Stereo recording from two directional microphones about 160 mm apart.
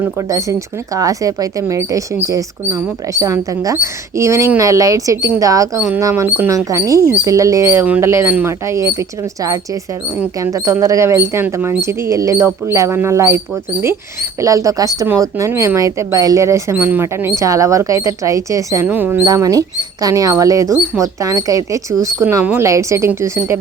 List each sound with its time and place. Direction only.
0.0 s speech: 20° right (ahead or behind)
14.4 s speech: 20° right (ahead or behind)
19.2 s speech: 25° right (ahead or behind)